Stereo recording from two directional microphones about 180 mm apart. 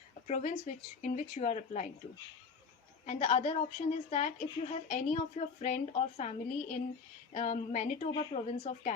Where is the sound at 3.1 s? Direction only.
40° left (ahead or behind).